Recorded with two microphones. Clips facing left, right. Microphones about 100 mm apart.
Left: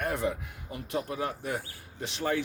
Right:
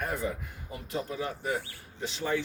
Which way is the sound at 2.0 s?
70° left (ahead or behind).